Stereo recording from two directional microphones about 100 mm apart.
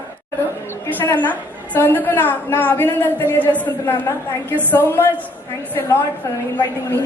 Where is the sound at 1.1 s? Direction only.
15° left (ahead or behind).